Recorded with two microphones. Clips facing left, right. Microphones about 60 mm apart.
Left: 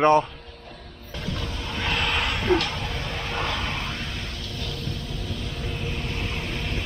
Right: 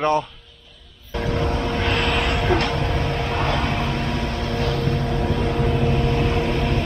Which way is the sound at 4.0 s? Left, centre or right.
Right.